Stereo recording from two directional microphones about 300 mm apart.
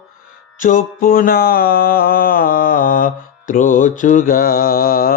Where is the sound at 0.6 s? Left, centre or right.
Left.